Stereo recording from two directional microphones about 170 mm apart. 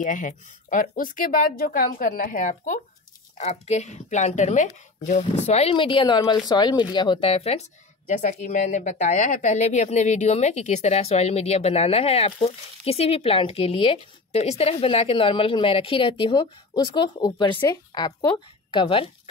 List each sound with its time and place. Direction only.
0.0 s speech: 50° left (ahead or behind)
8.1 s speech: 50° left (ahead or behind); by 19.0 s 30° left (ahead or behind)